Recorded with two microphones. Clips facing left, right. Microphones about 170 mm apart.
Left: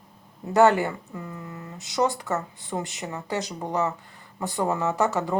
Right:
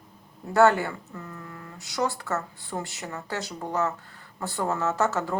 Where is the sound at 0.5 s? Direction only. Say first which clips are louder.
Left 1 dB; 20° left (ahead or behind).